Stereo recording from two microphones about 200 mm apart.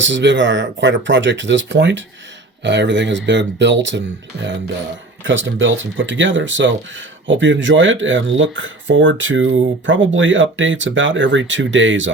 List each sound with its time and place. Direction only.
0.0 s speech: 65° right (ahead or behind)
5.2 s speech: 70° right (ahead or behind)